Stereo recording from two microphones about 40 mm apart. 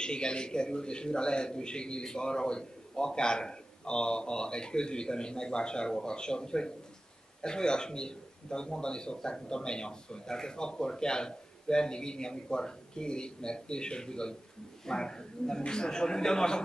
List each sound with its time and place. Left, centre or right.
0.0 s a man's voice: left